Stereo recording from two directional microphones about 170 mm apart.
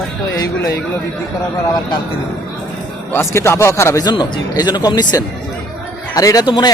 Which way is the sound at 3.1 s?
15° left (ahead or behind).